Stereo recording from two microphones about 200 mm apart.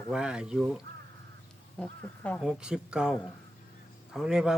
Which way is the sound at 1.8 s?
5° left (ahead or behind).